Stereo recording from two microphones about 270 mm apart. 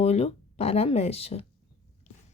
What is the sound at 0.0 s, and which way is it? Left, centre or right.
Speech, left.